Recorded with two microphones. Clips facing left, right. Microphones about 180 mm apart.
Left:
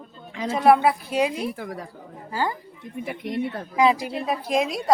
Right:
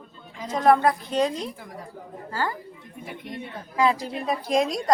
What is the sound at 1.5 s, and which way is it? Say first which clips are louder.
Speech: left 8 dB; 70° left (ahead or behind).